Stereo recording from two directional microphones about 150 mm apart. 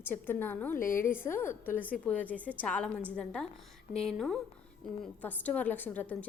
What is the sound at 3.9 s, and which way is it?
A woman's voice, 5° left (ahead or behind).